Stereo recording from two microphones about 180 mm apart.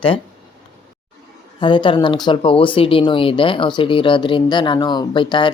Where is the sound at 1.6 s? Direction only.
25° left (ahead or behind).